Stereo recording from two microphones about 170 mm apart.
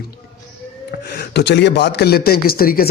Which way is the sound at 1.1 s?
80° left.